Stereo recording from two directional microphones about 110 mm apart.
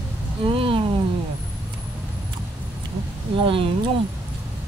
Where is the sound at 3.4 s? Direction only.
55° right (ahead or behind).